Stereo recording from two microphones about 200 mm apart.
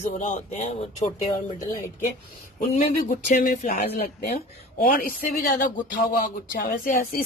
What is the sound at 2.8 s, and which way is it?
Speech, 40° left (ahead or behind).